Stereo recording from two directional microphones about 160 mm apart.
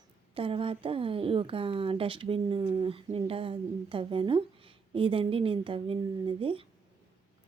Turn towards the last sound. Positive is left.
turn(degrees=-35)  # may be behind; listen again after turning